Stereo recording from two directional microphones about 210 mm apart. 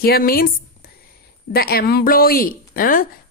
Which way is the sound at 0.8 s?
45° left (ahead or behind).